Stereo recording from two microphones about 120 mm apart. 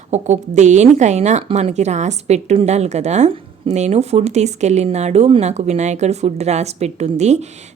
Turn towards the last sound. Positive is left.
turn(degrees=-70)  # may be behind; listen again after turning